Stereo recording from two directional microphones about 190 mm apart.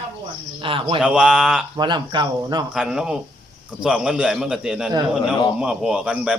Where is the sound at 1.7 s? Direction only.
25° right (ahead or behind).